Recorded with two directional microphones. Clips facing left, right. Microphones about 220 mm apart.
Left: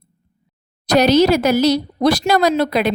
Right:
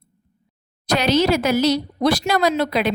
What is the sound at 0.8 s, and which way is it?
Speech, 40° left (ahead or behind).